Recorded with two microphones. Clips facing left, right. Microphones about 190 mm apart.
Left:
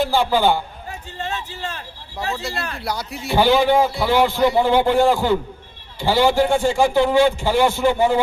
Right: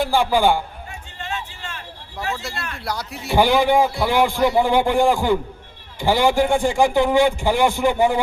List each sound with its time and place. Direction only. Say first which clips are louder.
0.0 s a man's voice: even; 15° right (ahead or behind)
1.2 s a sound: left 3 dB; 35° left (ahead or behind)
2.6 s a man's voice: left 4 dB; 35° left (ahead or behind)
2.8 s speech: right 1 dB; centre (ahead or behind)
3.3 s a man's voice: left 1 dB; 15° right (ahead or behind)